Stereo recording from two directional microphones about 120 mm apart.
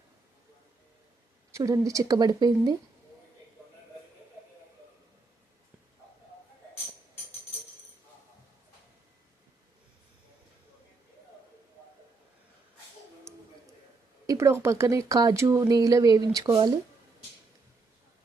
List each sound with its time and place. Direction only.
1.5 s speech: 25° right (ahead or behind)
14.3 s speech: 25° right (ahead or behind)